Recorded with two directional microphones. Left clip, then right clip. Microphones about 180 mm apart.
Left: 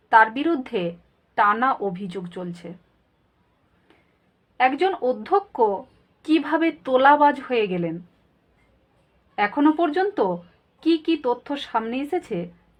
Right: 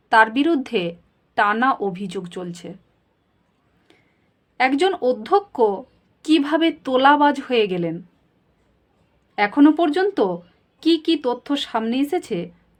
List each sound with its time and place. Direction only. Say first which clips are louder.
0.1 s speech: right 1 dB; 30° right (ahead or behind)
4.5 s a woman's voice: right 2 dB; 35° right (ahead or behind)
9.3 s speech: right 4 dB; 35° right (ahead or behind)